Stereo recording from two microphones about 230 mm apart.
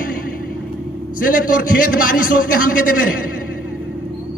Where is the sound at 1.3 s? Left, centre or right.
Left.